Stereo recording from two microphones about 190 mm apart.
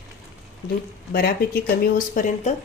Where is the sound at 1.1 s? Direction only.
55° left (ahead or behind).